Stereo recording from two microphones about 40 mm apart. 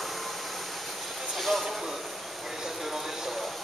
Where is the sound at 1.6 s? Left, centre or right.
Centre.